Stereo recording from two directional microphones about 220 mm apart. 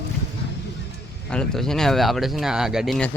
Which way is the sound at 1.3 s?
5° left (ahead or behind).